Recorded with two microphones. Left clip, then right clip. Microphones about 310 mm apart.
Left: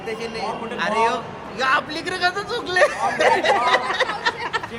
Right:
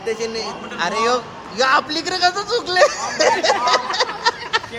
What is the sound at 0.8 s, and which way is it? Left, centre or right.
A man's voice, centre.